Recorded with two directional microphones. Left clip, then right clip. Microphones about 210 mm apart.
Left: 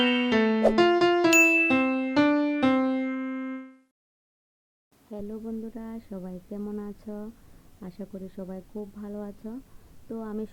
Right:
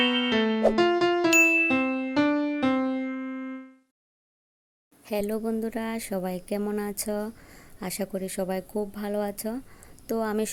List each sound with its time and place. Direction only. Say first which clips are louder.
0.0 s music: even; centre (ahead or behind)
5.3 s speech: right 8 dB; 30° right (ahead or behind)
7.8 s speech: right 10 dB; 15° right (ahead or behind)